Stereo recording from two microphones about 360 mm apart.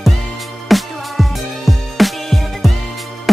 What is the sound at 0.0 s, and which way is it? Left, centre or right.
Music, centre.